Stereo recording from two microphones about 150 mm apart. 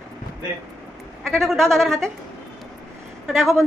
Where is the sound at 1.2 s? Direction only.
Centre (ahead or behind).